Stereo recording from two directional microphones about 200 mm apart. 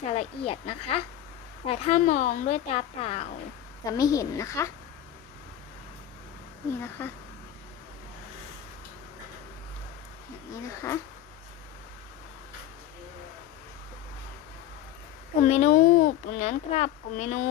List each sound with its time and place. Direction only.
0.1 s speech: 30° left (ahead or behind)
3.8 s a woman's voice: 15° left (ahead or behind)
7.0 s a woman's voice: 10° left (ahead or behind)
10.5 s a woman's voice: 15° left (ahead or behind)
15.4 s speech: 35° left (ahead or behind)